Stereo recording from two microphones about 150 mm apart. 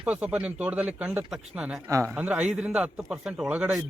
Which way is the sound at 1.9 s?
15° right (ahead or behind).